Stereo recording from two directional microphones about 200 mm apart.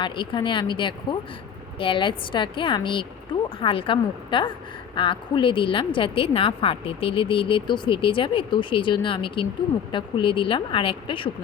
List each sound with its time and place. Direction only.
0.0 s a woman's voice: 25° left (ahead or behind)